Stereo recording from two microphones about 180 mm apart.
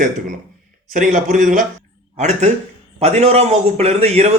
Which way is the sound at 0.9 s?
45° right (ahead or behind).